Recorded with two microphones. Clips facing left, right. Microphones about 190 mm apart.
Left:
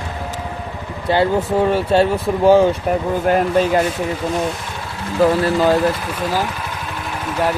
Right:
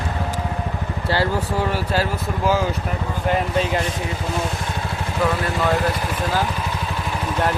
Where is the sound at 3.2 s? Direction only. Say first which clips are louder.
Left 4 dB; 50° left (ahead or behind).